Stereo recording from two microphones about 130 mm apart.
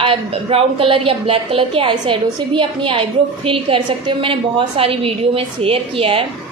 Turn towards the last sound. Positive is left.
turn(degrees=-45)  # may be behind; listen again after turning